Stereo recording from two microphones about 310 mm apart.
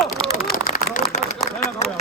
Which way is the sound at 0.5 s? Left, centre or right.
Left.